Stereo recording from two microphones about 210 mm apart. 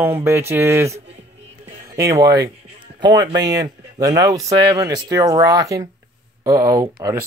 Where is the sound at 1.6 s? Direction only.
15° right (ahead or behind).